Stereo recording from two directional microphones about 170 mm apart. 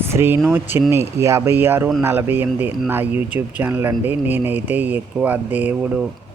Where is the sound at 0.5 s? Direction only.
15° right (ahead or behind).